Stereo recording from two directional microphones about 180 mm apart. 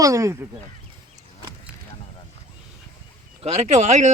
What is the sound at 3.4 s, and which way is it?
Speech, 35° right (ahead or behind).